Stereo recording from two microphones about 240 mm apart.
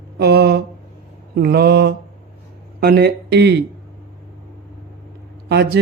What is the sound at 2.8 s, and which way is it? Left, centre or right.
Speech, right.